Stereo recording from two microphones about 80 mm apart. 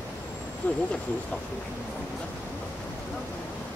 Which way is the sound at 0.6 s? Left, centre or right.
Left.